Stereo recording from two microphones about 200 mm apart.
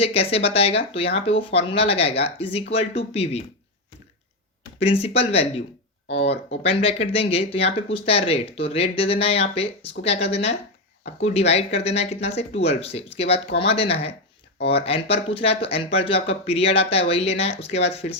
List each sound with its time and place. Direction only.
0.0 s speech: 30° left (ahead or behind)
4.8 s speech: 30° left (ahead or behind)